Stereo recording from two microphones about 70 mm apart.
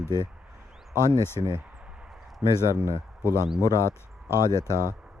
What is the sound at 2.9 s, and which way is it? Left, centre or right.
Speech, left.